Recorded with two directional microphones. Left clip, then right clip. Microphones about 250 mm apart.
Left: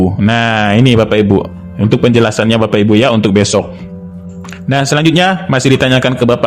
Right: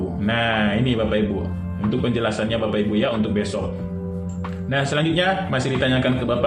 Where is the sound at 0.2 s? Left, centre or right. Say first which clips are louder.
Left 6 dB; left.